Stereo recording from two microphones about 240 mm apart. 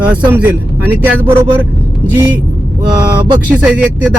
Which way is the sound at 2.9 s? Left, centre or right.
Centre.